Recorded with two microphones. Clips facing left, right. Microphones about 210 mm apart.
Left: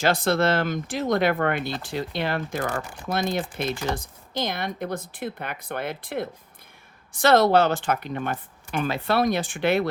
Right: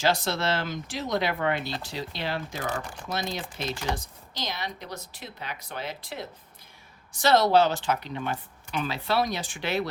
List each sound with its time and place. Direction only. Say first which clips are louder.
0.0 s speech: left 5 dB; 55° left (ahead or behind)